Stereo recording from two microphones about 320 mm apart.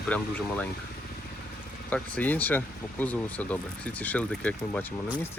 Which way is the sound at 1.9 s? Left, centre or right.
Centre.